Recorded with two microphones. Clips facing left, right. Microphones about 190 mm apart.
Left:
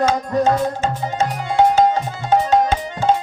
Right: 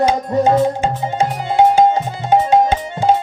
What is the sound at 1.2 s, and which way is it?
Music, 10° right (ahead or behind).